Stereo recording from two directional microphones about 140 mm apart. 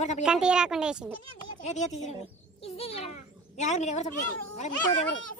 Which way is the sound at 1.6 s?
55° left (ahead or behind).